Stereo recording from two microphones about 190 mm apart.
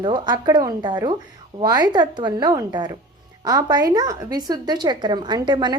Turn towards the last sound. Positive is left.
turn(degrees=-25)  # may be behind; listen again after turning